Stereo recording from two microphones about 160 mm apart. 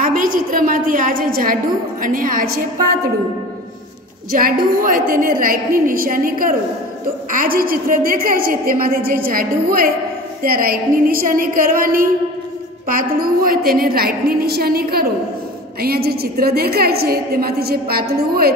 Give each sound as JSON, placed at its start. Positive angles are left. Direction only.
{"t": 0.0, "sound": "a woman's voice", "side_deg": -60}
{"t": 4.3, "sound": "a woman's voice", "side_deg": -60}